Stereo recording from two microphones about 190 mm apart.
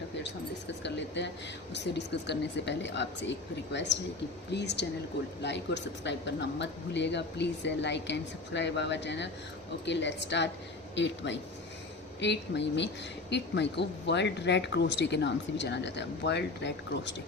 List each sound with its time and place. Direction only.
0.2 s speech: 65° left (ahead or behind)